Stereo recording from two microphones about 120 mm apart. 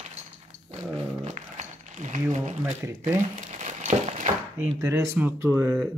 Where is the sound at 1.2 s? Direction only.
80° right.